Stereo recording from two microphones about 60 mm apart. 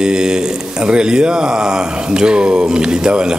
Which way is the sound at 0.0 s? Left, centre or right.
Centre.